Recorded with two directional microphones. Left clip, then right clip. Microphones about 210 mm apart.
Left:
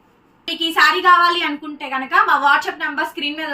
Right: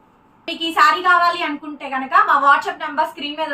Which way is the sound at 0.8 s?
15° right (ahead or behind).